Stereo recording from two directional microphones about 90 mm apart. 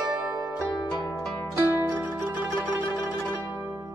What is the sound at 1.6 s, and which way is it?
Zither, 20° right (ahead or behind).